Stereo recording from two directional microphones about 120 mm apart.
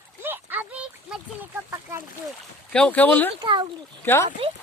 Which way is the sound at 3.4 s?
40° right (ahead or behind).